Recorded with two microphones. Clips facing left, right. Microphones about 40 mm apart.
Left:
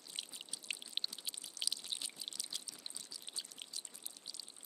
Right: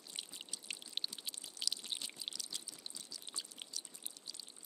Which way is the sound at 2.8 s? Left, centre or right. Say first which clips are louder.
Even; centre.